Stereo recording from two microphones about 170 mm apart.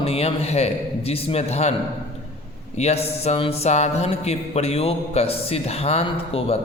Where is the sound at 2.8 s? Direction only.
40° left (ahead or behind).